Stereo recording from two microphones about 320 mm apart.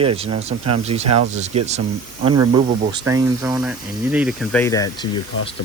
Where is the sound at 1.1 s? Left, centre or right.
Right.